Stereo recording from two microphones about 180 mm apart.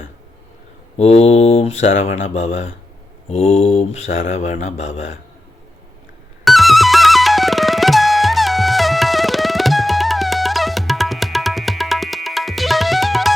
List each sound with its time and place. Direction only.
0.9 s mantra: 35° left (ahead or behind)
2.1 s speech: 90° left
3.2 s mantra: 35° left (ahead or behind)
4.9 s speech: 90° left
6.4 s music: centre (ahead or behind)